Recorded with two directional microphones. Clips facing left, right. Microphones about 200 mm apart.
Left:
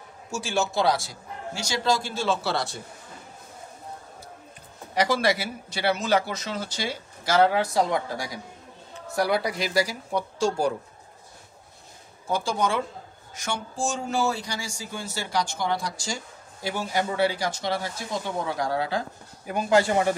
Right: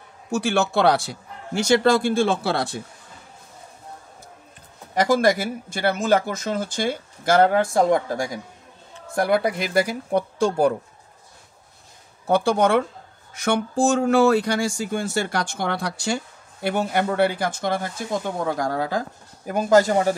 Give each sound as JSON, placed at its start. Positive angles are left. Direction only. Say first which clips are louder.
{"t": 0.3, "sound": "speech", "louder": "right 6 dB", "side_deg": -65}
{"t": 4.9, "sound": "speech", "louder": "right 5 dB", "side_deg": -45}
{"t": 12.3, "sound": "speech", "louder": "right 7 dB", "side_deg": -60}